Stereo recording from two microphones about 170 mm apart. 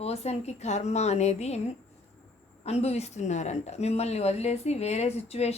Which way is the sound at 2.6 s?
40° left (ahead or behind).